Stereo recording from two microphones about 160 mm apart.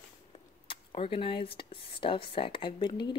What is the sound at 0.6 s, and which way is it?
Speech, 35° left (ahead or behind).